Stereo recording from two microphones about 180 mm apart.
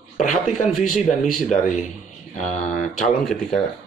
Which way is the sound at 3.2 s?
5° left (ahead or behind).